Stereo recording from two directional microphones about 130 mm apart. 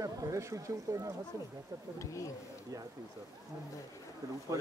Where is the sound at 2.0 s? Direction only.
25° left (ahead or behind).